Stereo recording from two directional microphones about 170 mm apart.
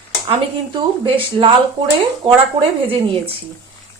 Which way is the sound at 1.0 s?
30° right (ahead or behind).